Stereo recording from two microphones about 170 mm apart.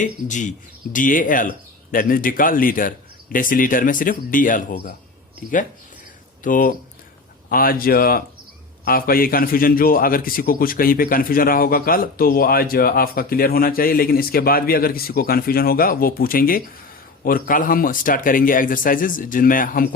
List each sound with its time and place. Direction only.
0.0 s speech: 45° left (ahead or behind)
6.4 s a man's voice: 55° left (ahead or behind)